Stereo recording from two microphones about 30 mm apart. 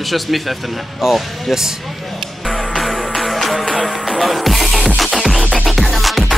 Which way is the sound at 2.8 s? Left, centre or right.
Centre.